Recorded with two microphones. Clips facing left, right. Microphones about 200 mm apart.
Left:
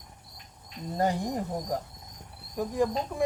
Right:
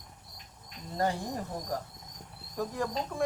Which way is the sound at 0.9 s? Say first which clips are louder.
Left 3 dB; 15° left (ahead or behind).